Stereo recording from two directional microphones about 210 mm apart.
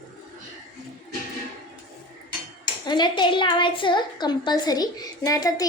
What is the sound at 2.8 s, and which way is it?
A woman's voice, 20° left (ahead or behind).